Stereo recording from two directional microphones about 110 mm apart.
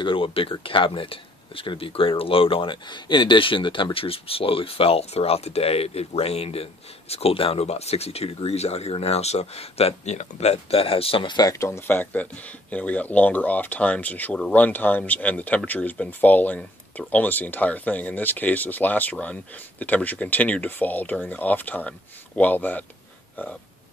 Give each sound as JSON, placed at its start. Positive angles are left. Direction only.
{"t": 0.0, "sound": "speech", "side_deg": 55}
{"t": 11.5, "sound": "speech", "side_deg": 25}